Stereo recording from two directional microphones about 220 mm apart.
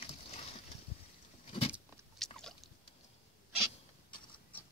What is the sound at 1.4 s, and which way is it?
Vehicle, 25° left (ahead or behind).